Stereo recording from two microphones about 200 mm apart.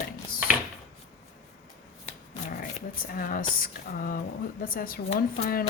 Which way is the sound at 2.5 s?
45° left (ahead or behind).